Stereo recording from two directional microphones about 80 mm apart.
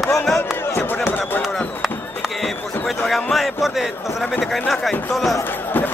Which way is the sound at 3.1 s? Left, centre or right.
Centre.